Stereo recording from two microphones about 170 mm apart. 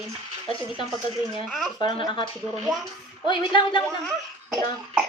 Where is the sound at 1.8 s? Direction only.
25° left (ahead or behind).